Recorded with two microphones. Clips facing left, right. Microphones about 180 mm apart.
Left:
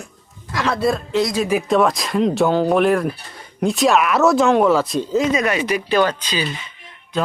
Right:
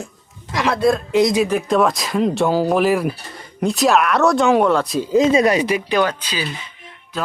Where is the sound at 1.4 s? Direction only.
5° left (ahead or behind).